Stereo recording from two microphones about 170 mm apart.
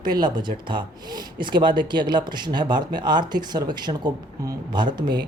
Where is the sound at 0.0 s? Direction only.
25° right (ahead or behind).